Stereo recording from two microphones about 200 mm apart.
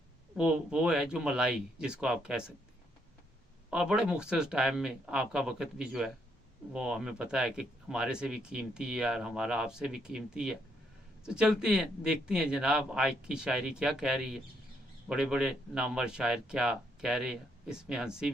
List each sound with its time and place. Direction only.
0.3 s speech: 5° right (ahead or behind)
3.7 s speech: 5° right (ahead or behind)